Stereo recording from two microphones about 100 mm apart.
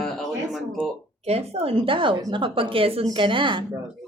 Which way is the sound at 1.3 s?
85° right.